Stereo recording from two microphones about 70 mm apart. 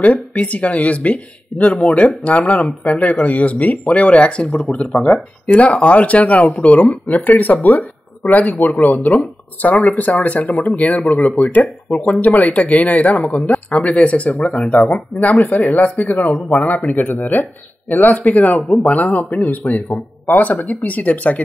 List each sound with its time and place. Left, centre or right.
0.0 s speech: left